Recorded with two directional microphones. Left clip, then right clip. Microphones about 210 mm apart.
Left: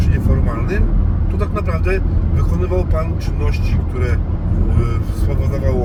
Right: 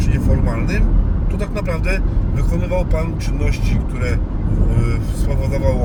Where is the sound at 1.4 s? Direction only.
25° right (ahead or behind).